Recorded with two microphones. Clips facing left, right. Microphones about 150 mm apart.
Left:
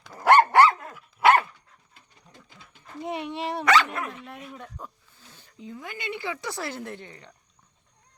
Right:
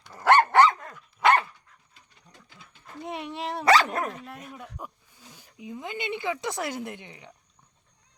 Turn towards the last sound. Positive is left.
turn(degrees=-15)  # may be behind; listen again after turning